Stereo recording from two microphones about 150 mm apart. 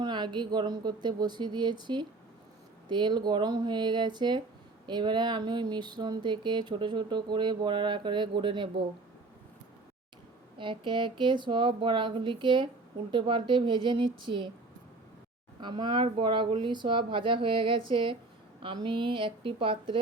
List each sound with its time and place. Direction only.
0.0 s speech: 30° right (ahead or behind)
10.6 s speech: 30° right (ahead or behind)
15.6 s speech: 30° right (ahead or behind)